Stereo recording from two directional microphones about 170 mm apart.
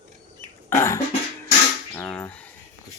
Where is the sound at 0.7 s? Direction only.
15° left (ahead or behind).